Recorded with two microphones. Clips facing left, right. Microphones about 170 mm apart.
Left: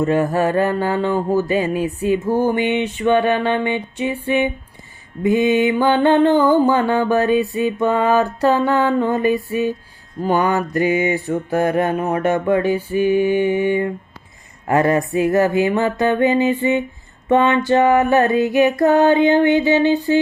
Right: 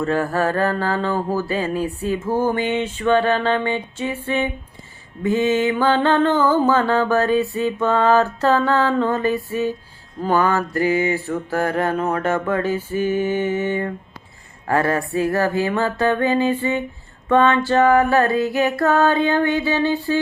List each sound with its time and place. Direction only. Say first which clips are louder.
0.0 s female singing: left 3 dB; 20° left (ahead or behind)
2.0 s mantra: left 5 dB; 15° left (ahead or behind)
14.7 s female singing: left 4 dB; 20° left (ahead or behind)